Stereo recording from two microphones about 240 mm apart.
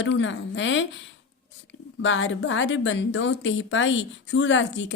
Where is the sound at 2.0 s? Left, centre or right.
Left.